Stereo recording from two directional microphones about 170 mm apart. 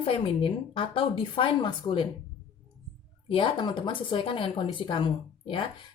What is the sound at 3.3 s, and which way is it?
A woman's voice, 30° left (ahead or behind).